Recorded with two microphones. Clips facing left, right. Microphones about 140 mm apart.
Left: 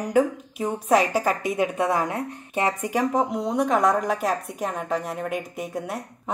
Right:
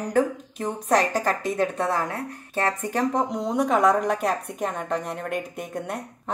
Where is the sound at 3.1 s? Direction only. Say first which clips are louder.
Left 1 dB; centre (ahead or behind).